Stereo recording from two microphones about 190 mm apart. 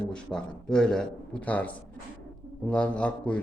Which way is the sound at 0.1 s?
5° left (ahead or behind).